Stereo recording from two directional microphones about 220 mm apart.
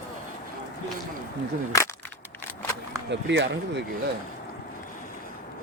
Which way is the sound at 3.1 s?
55° right (ahead or behind).